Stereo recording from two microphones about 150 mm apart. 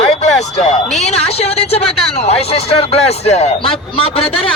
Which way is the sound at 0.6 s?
50° left (ahead or behind).